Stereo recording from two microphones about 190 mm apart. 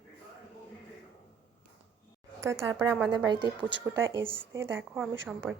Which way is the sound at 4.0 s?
15° right (ahead or behind).